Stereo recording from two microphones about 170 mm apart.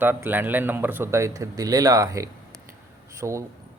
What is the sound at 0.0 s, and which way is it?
Speech, 10° right (ahead or behind).